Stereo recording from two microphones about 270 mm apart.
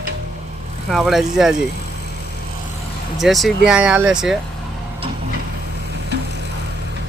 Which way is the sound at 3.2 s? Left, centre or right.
Centre.